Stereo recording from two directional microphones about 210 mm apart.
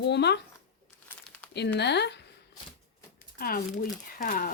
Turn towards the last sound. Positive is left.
turn(degrees=40)  # may be behind; listen again after turning